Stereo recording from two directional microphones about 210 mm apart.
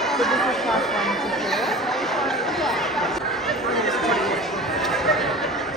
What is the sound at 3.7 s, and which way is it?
Chatter, centre (ahead or behind).